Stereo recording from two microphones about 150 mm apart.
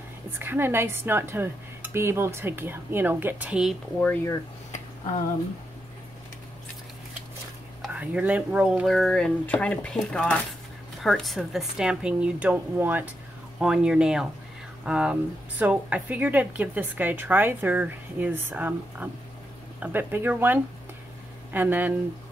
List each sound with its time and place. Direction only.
0.4 s a woman's voice: 15° right (ahead or behind)
4.0 s speech: 10° left (ahead or behind)
7.8 s speech: 10° right (ahead or behind)
8.8 s a woman's voice: 5° left (ahead or behind); by 21.9 s 10° right (ahead or behind)